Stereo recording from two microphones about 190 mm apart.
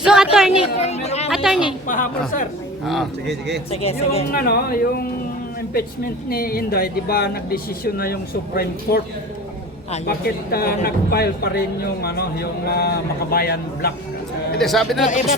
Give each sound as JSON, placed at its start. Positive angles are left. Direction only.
{"t": 0.0, "sound": "a sound", "side_deg": -5}
{"t": 0.8, "sound": "speech", "side_deg": 35}
{"t": 1.3, "sound": "speech", "side_deg": 0}
{"t": 1.9, "sound": "speech", "side_deg": 45}
{"t": 2.8, "sound": "speech", "side_deg": 0}
{"t": 3.7, "sound": "speech", "side_deg": 30}
{"t": 4.3, "sound": "speech", "side_deg": 50}
{"t": 6.2, "sound": "speech", "side_deg": 50}
{"t": 10.1, "sound": "speech", "side_deg": 55}
{"t": 14.6, "sound": "speech", "side_deg": 0}
{"t": 15.0, "sound": "speech", "side_deg": 40}